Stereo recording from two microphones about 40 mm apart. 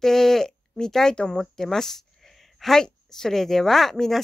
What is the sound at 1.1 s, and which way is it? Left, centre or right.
Speech, left.